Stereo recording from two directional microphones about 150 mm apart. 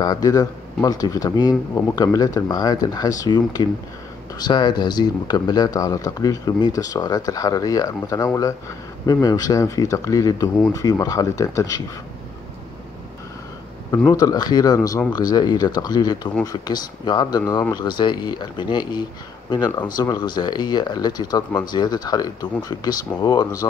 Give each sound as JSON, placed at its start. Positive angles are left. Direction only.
{"t": 0.0, "sound": "speech", "side_deg": 25}
{"t": 14.1, "sound": "speech", "side_deg": 25}